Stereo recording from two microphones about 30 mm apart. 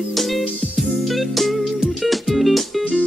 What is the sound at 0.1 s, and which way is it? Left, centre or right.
Music, centre.